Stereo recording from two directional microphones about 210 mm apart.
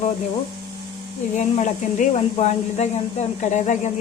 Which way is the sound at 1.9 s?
35° left (ahead or behind).